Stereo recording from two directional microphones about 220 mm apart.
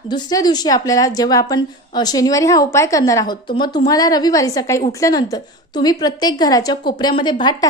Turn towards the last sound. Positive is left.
turn(degrees=20)  # may be behind; listen again after turning